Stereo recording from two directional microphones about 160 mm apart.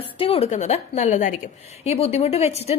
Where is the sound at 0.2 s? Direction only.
35° left (ahead or behind).